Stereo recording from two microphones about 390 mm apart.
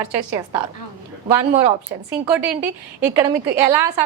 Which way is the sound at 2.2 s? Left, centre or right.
Centre.